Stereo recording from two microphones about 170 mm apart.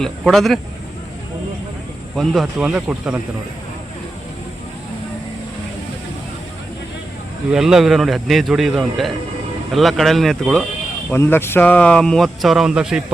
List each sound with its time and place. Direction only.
0.0 s speech: centre (ahead or behind)
2.1 s speech: centre (ahead or behind)
7.5 s speech: 5° right (ahead or behind)
11.1 s speech: 15° left (ahead or behind); by 13.0 s 5° right (ahead or behind)